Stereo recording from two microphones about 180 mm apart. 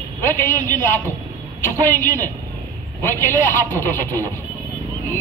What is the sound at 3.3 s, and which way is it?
A woman's voice, 10° left (ahead or behind).